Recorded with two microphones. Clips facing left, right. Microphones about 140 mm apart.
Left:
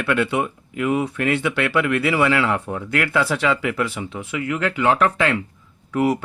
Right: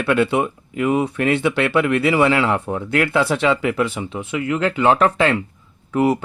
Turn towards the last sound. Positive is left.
turn(degrees=-25)  # may be behind; listen again after turning